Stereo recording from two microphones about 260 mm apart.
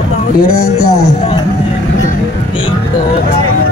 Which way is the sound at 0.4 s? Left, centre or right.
Left.